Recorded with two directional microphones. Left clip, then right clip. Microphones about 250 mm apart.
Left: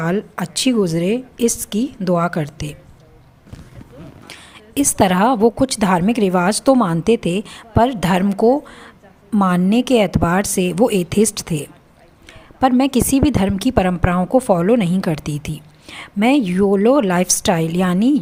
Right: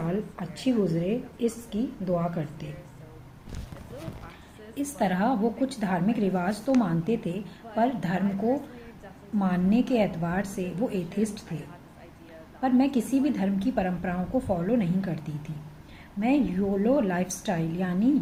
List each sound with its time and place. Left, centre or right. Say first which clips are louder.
0.0 s a woman's voice: left 11 dB; left
4.7 s a woman's voice: left 13 dB; left
12.5 s a woman's voice: left 10 dB; left